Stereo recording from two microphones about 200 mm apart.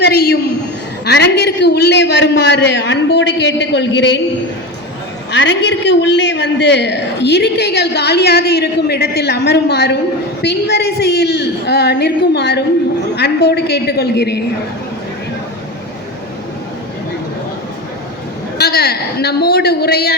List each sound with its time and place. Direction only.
0.0 s a sound: 50° left (ahead or behind)
1.0 s a man's voice: 55° left (ahead or behind)
5.3 s a man's voice: 65° left (ahead or behind)
18.5 s a man's voice: 55° left (ahead or behind)